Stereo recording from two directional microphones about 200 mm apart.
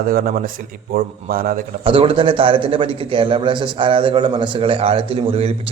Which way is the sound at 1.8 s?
25° right (ahead or behind).